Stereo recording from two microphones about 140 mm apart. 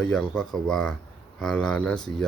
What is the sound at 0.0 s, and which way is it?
Speech, 5° left (ahead or behind).